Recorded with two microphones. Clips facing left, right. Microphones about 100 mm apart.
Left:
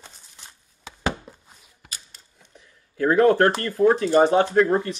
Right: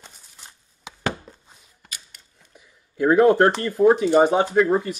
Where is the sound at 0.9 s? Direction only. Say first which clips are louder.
Right 1 dB; 15° right (ahead or behind).